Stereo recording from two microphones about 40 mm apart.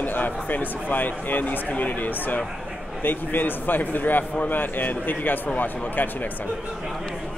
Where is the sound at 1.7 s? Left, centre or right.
Left.